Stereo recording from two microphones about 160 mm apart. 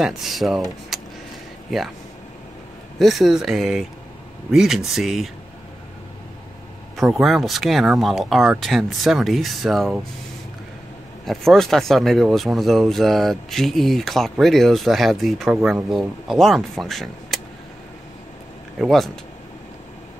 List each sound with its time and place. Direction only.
0.0 s speech: centre (ahead or behind)
0.9 s vehicle: centre (ahead or behind)
1.7 s speech: centre (ahead or behind)
3.0 s speech: centre (ahead or behind)
7.0 s speech: centre (ahead or behind)
11.2 s speech: centre (ahead or behind)
18.8 s speech: centre (ahead or behind)